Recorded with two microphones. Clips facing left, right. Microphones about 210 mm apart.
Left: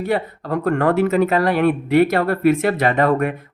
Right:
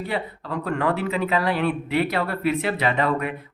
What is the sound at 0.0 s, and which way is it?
Speech, 50° left (ahead or behind).